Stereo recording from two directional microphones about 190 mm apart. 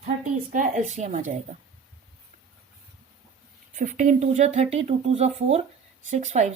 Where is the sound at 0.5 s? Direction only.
45° right (ahead or behind).